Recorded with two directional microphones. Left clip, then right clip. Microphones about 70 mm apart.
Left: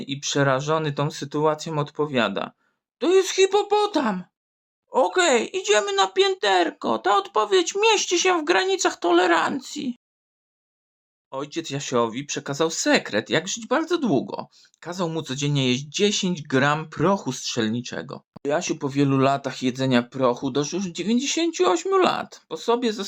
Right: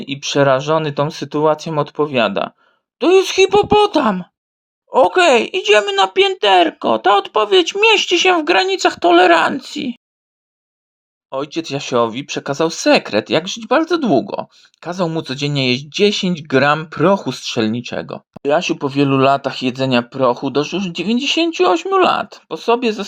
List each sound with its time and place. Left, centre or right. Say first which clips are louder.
0.0 s speech: right 8 dB; right
3.0 s speech: right 7 dB; right
4.9 s speech: right 8 dB; right
11.3 s speech: right 8 dB; right